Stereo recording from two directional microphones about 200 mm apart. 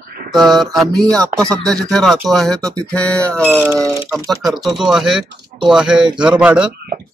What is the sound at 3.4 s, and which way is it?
Speech, 10° right (ahead or behind).